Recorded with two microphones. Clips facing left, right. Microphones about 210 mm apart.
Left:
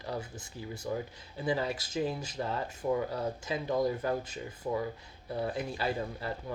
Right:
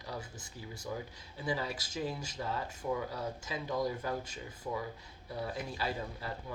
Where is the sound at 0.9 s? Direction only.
40° left (ahead or behind).